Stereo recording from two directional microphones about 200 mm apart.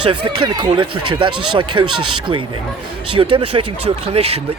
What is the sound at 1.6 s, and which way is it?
Speech, 90° right.